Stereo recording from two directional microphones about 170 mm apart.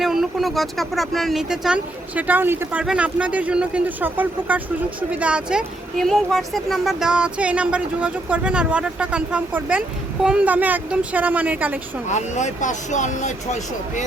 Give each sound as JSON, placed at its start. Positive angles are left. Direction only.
{"t": 0.0, "sound": "speech", "side_deg": 0}
{"t": 12.0, "sound": "speech", "side_deg": 45}